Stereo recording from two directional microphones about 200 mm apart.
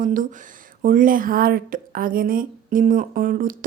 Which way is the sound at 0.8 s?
45° right (ahead or behind).